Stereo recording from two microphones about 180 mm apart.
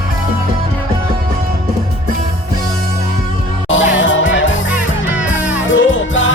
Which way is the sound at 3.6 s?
90° left.